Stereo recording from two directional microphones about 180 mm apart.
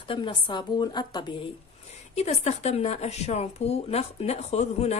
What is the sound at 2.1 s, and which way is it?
Speech, 40° left (ahead or behind).